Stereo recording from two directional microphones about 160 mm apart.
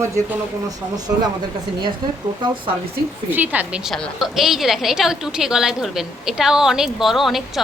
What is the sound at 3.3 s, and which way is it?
A woman's voice, 10° right (ahead or behind).